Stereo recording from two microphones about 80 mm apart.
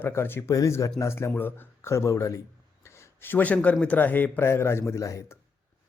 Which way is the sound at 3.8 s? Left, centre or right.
Centre.